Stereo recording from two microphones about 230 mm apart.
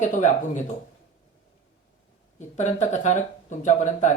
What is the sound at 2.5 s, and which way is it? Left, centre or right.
Speech, left.